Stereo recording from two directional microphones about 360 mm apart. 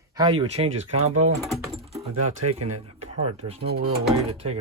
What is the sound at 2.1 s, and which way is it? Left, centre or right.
Speech, right.